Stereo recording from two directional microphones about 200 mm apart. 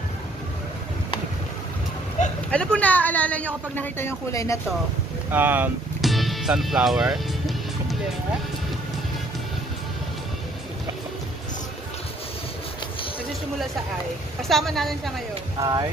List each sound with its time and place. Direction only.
2.2 s a sound: 35° left (ahead or behind)
2.5 s speech: 5° left (ahead or behind)
5.3 s music: 10° right (ahead or behind)
14.5 s a woman's voice: centre (ahead or behind)
15.6 s speech: 20° right (ahead or behind)